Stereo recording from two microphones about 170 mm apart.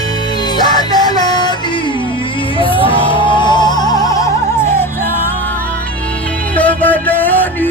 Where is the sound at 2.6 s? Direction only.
30° left (ahead or behind).